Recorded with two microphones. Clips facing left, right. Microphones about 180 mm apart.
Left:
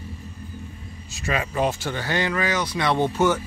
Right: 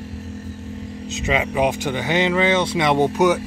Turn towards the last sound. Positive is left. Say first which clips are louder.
# right 4 dB
turn(degrees=-15)  # may be behind; listen again after turning